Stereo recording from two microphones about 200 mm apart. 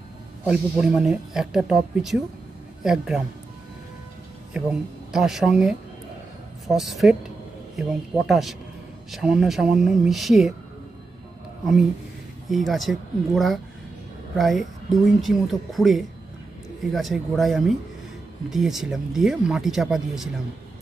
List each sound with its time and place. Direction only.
0.4 s speech: 5° right (ahead or behind)
4.6 s speech: 5° right (ahead or behind)
12.4 s speech: centre (ahead or behind)